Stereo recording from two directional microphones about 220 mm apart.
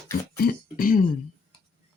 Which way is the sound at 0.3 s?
40° left (ahead or behind).